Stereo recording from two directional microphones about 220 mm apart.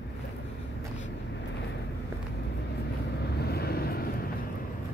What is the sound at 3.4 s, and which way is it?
Vehicle, 45° left (ahead or behind).